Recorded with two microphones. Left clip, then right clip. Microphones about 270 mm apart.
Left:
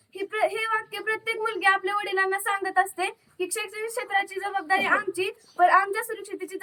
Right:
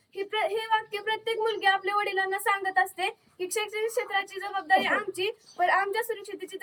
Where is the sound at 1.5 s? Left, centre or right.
Left.